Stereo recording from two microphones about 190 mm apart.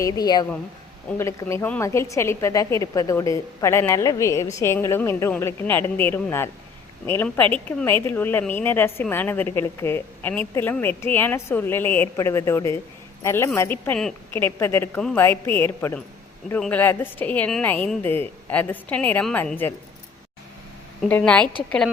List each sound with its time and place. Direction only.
0.0 s a woman's voice: 20° left (ahead or behind)
21.1 s a woman's voice: 5° left (ahead or behind)